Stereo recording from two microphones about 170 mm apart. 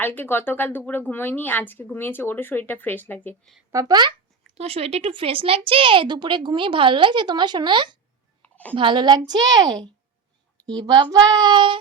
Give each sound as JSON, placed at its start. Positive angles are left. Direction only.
{"t": 0.0, "sound": "speech", "side_deg": 10}
{"t": 3.7, "sound": "speech", "side_deg": -20}
{"t": 4.5, "sound": "a woman's voice", "side_deg": -35}
{"t": 8.4, "sound": "a sound", "side_deg": 10}
{"t": 8.7, "sound": "a woman's voice", "side_deg": -30}